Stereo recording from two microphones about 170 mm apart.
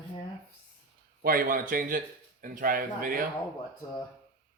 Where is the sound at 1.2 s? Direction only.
55° right (ahead or behind).